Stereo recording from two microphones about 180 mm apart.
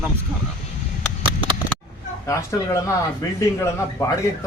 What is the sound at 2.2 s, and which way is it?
Speech, 15° left (ahead or behind).